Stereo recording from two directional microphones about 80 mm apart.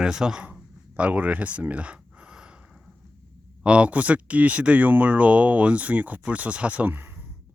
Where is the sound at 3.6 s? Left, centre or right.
Centre.